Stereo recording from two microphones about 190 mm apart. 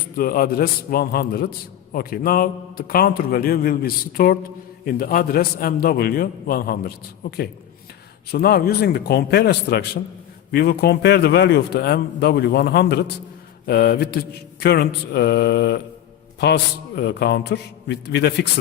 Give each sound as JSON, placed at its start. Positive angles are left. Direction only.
{"t": 0.2, "sound": "a man's voice", "side_deg": 50}